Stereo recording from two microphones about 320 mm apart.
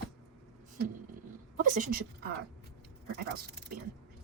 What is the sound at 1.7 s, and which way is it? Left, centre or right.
Speech, right.